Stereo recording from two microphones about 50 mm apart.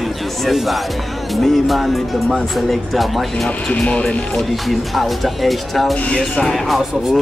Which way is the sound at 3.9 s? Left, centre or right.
Left.